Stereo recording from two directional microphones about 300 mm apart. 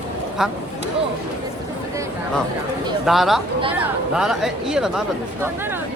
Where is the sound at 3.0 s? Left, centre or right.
Centre.